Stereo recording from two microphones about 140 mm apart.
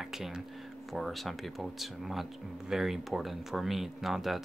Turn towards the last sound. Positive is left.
turn(degrees=0)  # may be behind; listen again after turning